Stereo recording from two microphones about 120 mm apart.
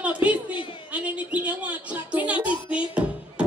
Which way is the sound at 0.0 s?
10° right (ahead or behind).